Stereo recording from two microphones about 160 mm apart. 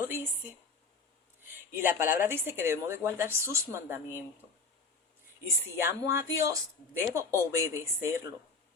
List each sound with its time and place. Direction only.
0.0 s a woman's voice: 10° right (ahead or behind)
1.7 s a woman's voice: 15° right (ahead or behind)
5.7 s a woman's voice: 15° right (ahead or behind)